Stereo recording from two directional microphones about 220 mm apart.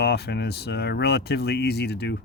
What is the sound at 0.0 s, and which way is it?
Speech, 45° left (ahead or behind).